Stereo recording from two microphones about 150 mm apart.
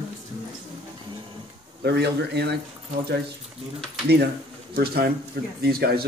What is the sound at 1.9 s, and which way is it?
Speech, 90° right.